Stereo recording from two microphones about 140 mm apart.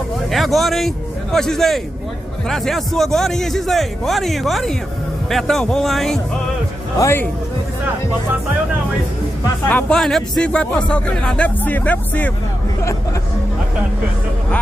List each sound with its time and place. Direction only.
0.3 s a man's voice: centre (ahead or behind)
7.0 s speech: 15° left (ahead or behind)
9.7 s speech: 10° left (ahead or behind)